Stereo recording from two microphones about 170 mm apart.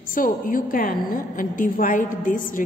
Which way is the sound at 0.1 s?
50° left (ahead or behind).